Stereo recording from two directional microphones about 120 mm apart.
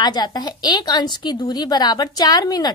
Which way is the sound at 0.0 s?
35° left (ahead or behind).